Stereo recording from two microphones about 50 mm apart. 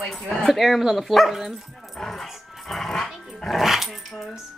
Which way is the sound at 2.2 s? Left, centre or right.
Centre.